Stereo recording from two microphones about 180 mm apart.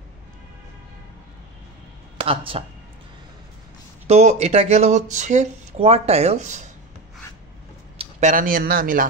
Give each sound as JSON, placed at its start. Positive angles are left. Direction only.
{"t": 2.1, "sound": "speech", "side_deg": -30}
{"t": 4.1, "sound": "speech", "side_deg": -40}
{"t": 8.0, "sound": "speech", "side_deg": -40}